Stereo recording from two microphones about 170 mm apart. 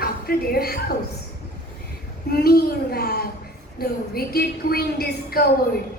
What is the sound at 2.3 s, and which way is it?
A woman's voice, 65° left (ahead or behind).